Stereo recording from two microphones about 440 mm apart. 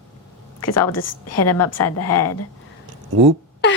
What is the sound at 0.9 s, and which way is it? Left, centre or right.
A woman's voice, left.